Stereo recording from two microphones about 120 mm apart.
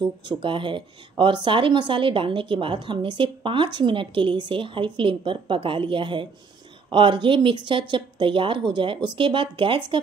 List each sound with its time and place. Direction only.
0.4 s speech: 45° right (ahead or behind)